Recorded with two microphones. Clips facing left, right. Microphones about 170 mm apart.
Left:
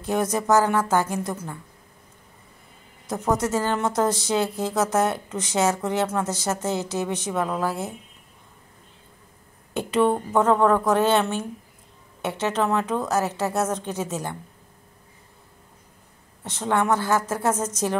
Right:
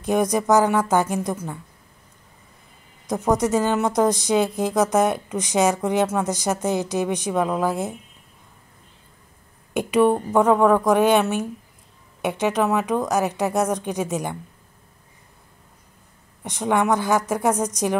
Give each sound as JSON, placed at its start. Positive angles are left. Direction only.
{"t": 0.0, "sound": "a woman's voice", "side_deg": -15}
{"t": 3.1, "sound": "a woman's voice", "side_deg": -15}
{"t": 9.8, "sound": "a woman's voice", "side_deg": -10}
{"t": 16.4, "sound": "a woman's voice", "side_deg": -15}